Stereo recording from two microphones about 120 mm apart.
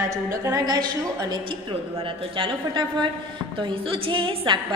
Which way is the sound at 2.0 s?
45° right (ahead or behind).